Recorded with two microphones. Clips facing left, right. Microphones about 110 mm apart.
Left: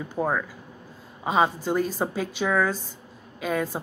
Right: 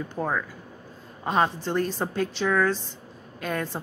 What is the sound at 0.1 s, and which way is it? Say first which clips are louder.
A woman's voice: left 4 dB; 10° left (ahead or behind).